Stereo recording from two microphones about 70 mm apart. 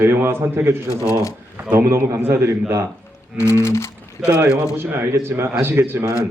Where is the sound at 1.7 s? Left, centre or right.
Right.